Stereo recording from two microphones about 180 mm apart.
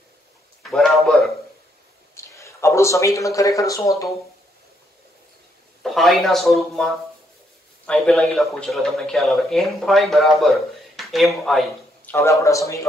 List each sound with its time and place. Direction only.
0.7 s a sound: centre (ahead or behind)
2.1 s a man's voice: 15° left (ahead or behind)
5.8 s a man's voice: centre (ahead or behind)
12.1 s speech: 15° left (ahead or behind)